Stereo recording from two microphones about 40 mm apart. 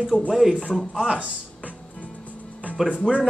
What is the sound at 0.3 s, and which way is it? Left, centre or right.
Speech, centre.